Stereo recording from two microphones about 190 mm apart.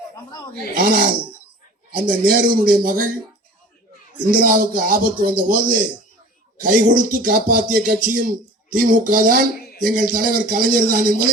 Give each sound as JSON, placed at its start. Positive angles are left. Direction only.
{"t": 0.8, "sound": "speech", "side_deg": -50}
{"t": 4.3, "sound": "speech", "side_deg": -50}